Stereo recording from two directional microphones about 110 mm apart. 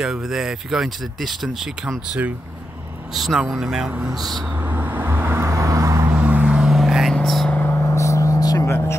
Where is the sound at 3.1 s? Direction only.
Centre (ahead or behind).